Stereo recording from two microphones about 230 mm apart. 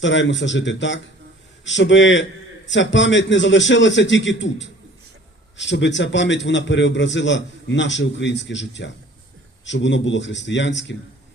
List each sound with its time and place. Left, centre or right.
0.0 s a man's voice: left